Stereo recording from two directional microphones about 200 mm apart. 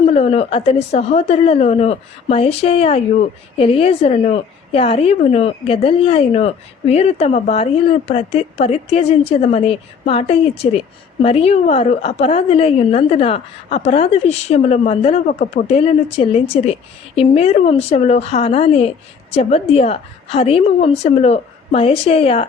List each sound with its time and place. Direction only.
0.0 s a woman's voice: 30° left (ahead or behind)